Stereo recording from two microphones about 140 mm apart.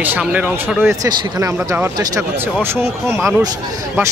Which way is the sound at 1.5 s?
15° right (ahead or behind).